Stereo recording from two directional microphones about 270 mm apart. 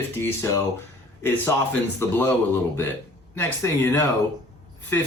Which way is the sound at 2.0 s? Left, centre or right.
Centre.